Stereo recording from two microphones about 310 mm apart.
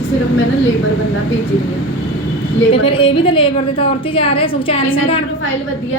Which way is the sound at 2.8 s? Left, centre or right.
Centre.